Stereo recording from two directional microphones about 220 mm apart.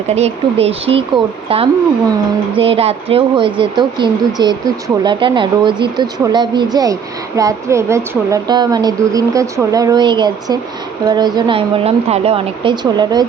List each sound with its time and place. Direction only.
0.1 s a woman's voice: 30° right (ahead or behind)